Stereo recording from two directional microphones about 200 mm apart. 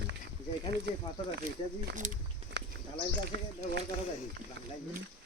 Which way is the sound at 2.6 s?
60° right (ahead or behind).